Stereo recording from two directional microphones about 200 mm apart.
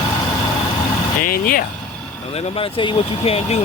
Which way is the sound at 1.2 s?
45° left (ahead or behind).